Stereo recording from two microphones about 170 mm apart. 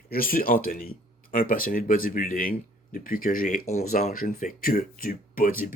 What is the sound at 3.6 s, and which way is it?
Speech, 40° left (ahead or behind).